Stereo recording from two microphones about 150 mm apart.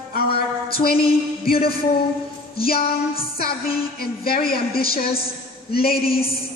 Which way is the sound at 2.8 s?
40° left (ahead or behind).